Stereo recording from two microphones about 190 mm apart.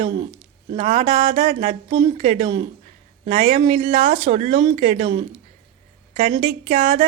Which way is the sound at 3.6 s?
40° right (ahead or behind).